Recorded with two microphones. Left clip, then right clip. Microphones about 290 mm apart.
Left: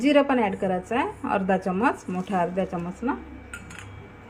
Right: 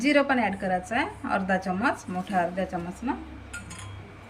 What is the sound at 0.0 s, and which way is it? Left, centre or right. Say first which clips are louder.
A woman's voice: left 2 dB; centre.